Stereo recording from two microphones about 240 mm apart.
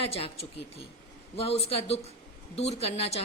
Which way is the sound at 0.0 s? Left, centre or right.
Left.